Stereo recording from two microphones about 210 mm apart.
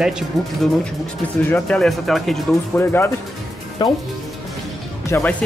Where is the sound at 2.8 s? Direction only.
10° left (ahead or behind).